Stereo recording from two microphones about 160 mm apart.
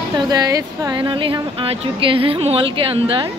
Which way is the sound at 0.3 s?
25° right (ahead or behind).